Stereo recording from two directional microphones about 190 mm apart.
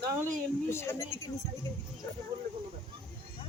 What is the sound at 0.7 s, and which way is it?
Speech, 15° left (ahead or behind).